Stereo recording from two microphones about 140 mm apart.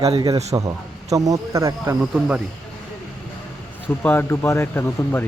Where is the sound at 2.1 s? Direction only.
5° right (ahead or behind).